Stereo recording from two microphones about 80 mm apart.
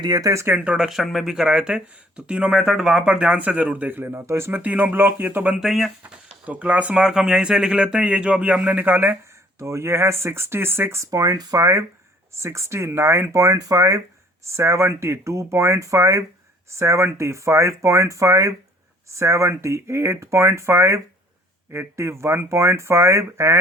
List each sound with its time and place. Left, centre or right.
0.0 s speech: right
0.4 s speech: centre
0.9 s speech: centre
2.6 s speech: centre; by 4.6 s right
4.6 s speech: right
5.5 s speech: centre
6.0 s speech: centre
9.6 s speech: right